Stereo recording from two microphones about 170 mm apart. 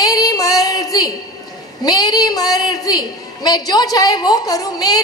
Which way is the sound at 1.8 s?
20° left (ahead or behind).